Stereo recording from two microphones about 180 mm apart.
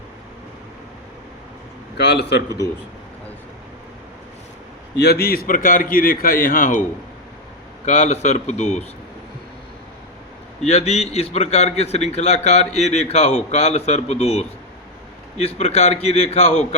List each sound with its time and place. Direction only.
2.0 s a man's voice: 70° left (ahead or behind)
4.9 s a man's voice: 60° left (ahead or behind)
7.9 s a man's voice: 40° left (ahead or behind)
10.7 s a man's voice: 35° left (ahead or behind)